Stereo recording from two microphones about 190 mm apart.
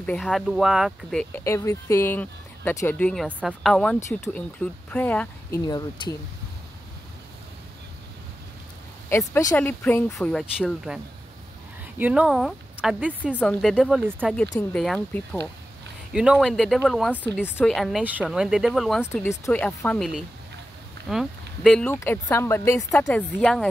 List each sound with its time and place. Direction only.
0.0 s speech: 5° left (ahead or behind)
1.3 s speech: 15° left (ahead or behind)
3.3 s speech: 5° right (ahead or behind)
5.7 s speech: 20° left (ahead or behind)
9.4 s speech: 15° left (ahead or behind)
12.0 s speech: 5° right (ahead or behind)
13.4 s speech: 5° left (ahead or behind)
21.9 s speech: 15° left (ahead or behind)
22.8 s speech: centre (ahead or behind)